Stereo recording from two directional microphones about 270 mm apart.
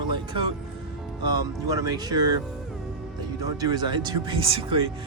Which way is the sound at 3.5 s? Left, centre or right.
Centre.